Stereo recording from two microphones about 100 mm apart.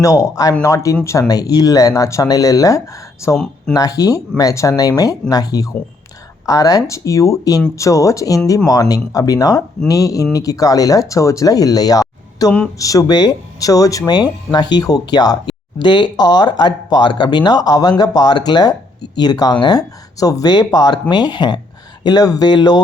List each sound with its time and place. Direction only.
0.0 s speech: 35° left (ahead or behind)
12.5 s a woman's voice: 10° left (ahead or behind)
12.8 s speech: 35° left (ahead or behind)